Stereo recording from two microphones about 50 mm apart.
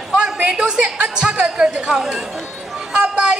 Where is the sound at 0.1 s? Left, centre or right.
Centre.